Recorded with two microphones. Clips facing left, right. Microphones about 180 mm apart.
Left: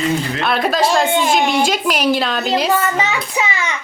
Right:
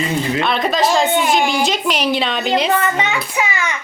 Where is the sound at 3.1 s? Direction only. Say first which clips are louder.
Even; 25° left (ahead or behind).